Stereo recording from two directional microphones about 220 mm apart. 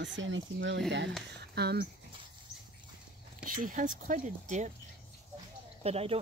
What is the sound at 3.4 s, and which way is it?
Speech, 40° right (ahead or behind).